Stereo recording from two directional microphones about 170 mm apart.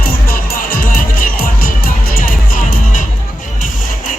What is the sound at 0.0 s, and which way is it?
Music, 60° left (ahead or behind).